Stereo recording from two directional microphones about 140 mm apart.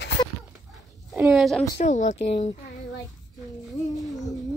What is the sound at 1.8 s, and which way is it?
Speech, 60° left (ahead or behind).